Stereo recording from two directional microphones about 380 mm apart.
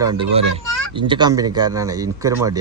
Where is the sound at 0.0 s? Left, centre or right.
Centre.